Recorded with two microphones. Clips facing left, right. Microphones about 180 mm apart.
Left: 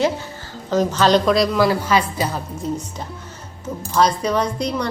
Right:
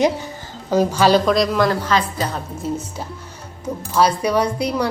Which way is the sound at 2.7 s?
5° right (ahead or behind).